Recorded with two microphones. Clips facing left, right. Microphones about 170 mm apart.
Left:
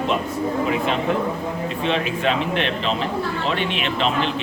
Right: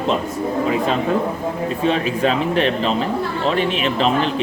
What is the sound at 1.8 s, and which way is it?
A man's voice, 40° right (ahead or behind).